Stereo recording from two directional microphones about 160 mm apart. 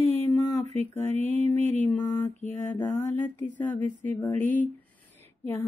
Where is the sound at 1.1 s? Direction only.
45° right (ahead or behind).